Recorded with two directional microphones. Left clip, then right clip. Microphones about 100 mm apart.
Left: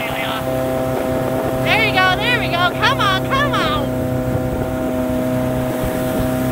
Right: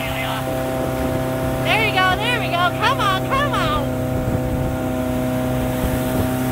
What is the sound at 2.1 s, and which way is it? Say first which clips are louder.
Music: left 2 dB; 25° right (ahead or behind).